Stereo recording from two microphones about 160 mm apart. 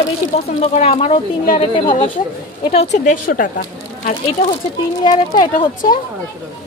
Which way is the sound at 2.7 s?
45° left (ahead or behind).